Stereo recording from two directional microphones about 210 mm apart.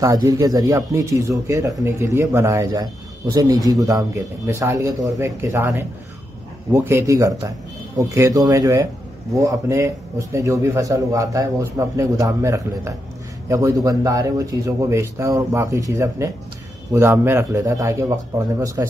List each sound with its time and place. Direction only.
0.0 s a man's voice: 15° right (ahead or behind)
6.7 s a man's voice: 10° right (ahead or behind)